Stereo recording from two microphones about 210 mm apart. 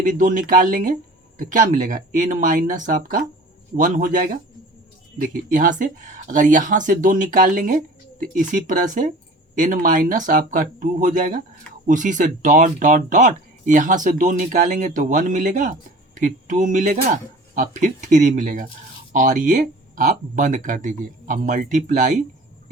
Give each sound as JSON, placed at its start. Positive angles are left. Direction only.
{"t": 0.0, "sound": "speech", "side_deg": -40}